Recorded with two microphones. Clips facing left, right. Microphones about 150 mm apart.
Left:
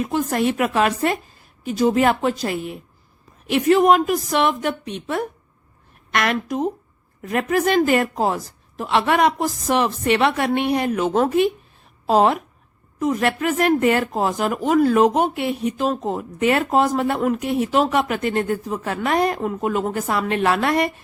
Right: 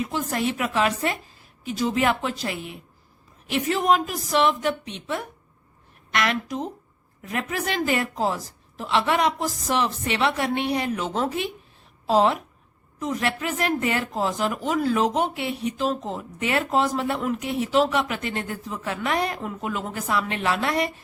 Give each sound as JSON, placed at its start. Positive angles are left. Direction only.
{"t": 0.0, "sound": "a woman's voice", "side_deg": 55}
{"t": 3.5, "sound": "a woman's voice", "side_deg": 60}